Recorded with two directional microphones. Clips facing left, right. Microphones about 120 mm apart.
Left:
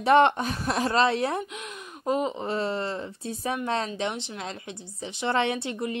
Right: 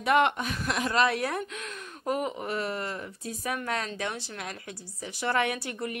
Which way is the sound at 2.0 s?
20° left (ahead or behind).